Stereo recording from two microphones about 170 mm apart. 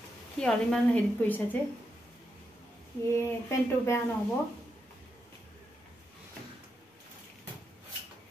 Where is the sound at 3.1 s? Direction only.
15° left (ahead or behind).